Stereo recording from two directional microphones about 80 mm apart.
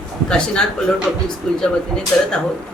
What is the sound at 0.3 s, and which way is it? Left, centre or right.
Speech, centre.